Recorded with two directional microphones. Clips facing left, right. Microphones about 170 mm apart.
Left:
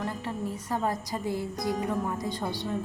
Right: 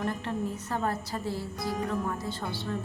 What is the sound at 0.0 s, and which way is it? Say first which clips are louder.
A woman's voice: right 1 dB; 10° left (ahead or behind).